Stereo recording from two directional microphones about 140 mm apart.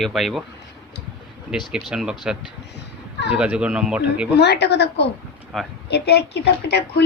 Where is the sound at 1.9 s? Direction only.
5° right (ahead or behind).